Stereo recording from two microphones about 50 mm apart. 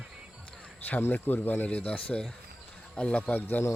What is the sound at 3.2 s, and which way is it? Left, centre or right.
Speech, left.